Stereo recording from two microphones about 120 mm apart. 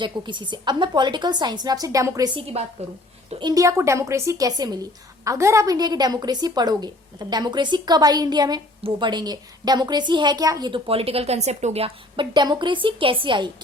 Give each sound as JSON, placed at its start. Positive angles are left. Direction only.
{"t": 0.0, "sound": "a woman's voice", "side_deg": -40}
{"t": 3.4, "sound": "a woman's voice", "side_deg": -30}
{"t": 10.7, "sound": "speech", "side_deg": -55}
{"t": 12.1, "sound": "a woman's voice", "side_deg": -40}